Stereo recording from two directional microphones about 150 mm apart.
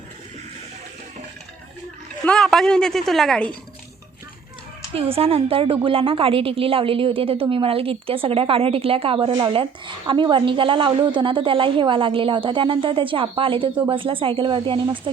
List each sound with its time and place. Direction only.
2.2 s a woman's voice: 5° left (ahead or behind)
4.9 s a woman's voice: 40° right (ahead or behind)